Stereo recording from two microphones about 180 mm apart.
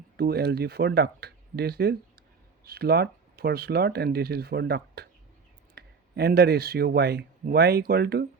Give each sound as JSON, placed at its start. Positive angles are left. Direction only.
{"t": 0.2, "sound": "speech", "side_deg": -60}